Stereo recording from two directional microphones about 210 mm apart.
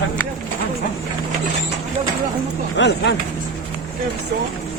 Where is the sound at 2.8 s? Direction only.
55° left (ahead or behind).